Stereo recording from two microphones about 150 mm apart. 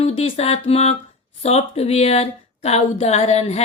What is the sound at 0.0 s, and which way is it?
Speech, 40° left (ahead or behind).